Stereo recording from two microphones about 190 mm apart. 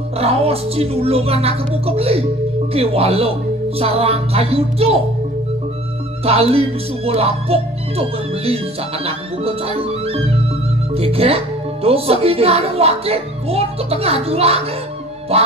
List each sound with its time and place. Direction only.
0.2 s speech: 30° right (ahead or behind)
6.2 s speech: 30° right (ahead or behind)